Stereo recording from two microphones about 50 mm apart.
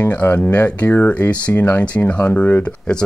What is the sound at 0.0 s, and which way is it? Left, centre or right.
Speech, left.